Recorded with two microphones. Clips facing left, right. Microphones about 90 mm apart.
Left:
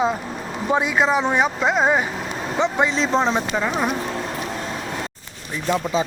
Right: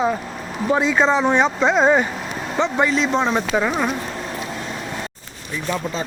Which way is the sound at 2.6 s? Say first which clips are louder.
Right 1 dB; 20° left (ahead or behind).